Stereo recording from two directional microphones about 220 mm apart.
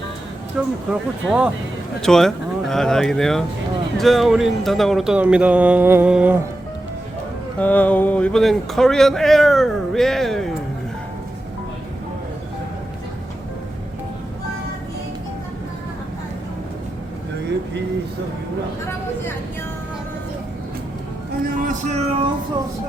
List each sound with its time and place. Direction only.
0.9 s speech: 5° right (ahead or behind)
7.6 s speech: 5° left (ahead or behind)
21.4 s a sound: 35° right (ahead or behind)